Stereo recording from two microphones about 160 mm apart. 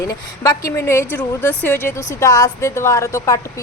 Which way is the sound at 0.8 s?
15° left (ahead or behind).